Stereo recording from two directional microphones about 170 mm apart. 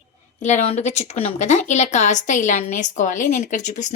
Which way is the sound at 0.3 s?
45° left (ahead or behind).